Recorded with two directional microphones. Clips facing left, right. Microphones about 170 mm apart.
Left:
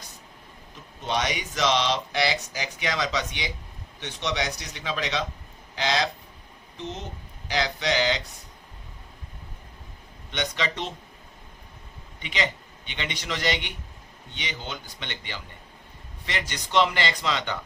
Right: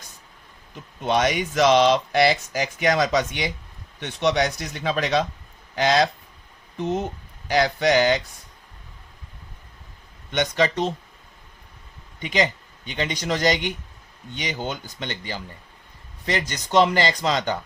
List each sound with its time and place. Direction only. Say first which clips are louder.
1.0 s speech: right 7 dB; 50° right (ahead or behind)
10.3 s speech: right 8 dB; 45° right (ahead or behind)
12.2 s speech: right 6 dB; 45° right (ahead or behind)